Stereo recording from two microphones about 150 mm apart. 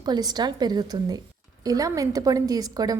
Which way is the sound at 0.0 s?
25° right (ahead or behind).